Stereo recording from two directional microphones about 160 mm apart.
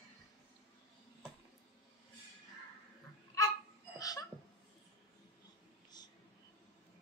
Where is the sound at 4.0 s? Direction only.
20° left (ahead or behind).